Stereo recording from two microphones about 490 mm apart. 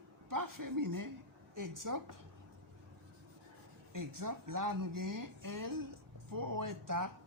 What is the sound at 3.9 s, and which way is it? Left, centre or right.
Speech, right.